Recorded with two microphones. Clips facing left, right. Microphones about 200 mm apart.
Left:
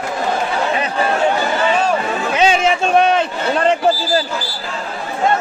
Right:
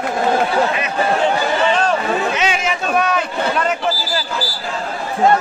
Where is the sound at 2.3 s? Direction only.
30° left (ahead or behind).